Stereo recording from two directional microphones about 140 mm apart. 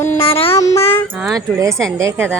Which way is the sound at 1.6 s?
20° right (ahead or behind).